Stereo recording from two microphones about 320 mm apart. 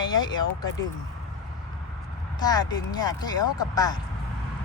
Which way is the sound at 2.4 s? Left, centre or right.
Centre.